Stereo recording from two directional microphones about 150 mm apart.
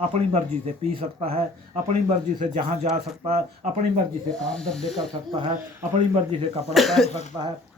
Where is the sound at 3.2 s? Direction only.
50° right (ahead or behind).